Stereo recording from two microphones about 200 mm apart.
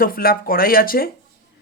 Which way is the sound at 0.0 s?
45° left (ahead or behind).